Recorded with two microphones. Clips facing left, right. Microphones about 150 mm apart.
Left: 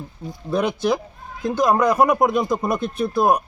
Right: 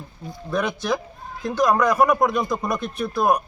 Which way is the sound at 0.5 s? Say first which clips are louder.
Left 3 dB; 30° left (ahead or behind).